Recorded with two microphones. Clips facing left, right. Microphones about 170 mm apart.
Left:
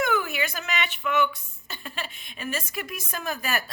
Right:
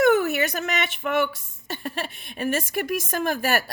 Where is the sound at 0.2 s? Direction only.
45° right (ahead or behind).